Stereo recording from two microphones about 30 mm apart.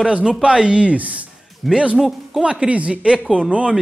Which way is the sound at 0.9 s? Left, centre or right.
Right.